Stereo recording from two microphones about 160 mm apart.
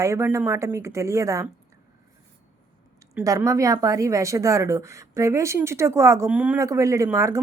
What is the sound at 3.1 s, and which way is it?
A woman's voice, 15° right (ahead or behind).